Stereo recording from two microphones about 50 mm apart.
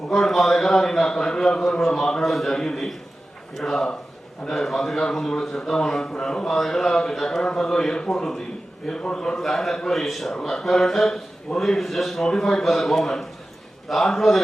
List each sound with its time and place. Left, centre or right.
0.1 s a man's voice: centre
2.2 s a man's voice: centre
9.4 s a man's voice: centre